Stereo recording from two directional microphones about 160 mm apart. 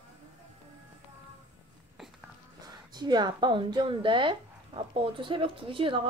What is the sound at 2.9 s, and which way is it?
Speech, 25° right (ahead or behind).